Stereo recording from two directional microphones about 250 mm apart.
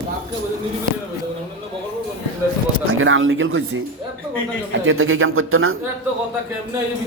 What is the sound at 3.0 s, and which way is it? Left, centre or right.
A man's voice, right.